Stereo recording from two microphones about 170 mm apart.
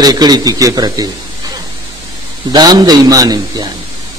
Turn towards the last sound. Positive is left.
turn(degrees=-25)  # may be behind; listen again after turning